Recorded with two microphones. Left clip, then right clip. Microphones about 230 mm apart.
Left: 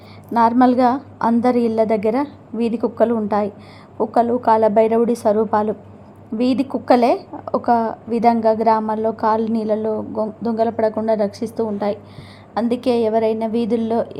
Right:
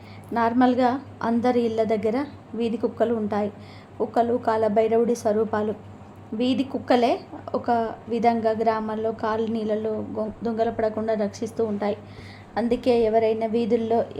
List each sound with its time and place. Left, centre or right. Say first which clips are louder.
0.3 s a woman's voice: left 6 dB; left